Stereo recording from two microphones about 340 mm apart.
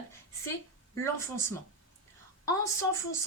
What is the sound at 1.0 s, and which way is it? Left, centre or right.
Speech, centre.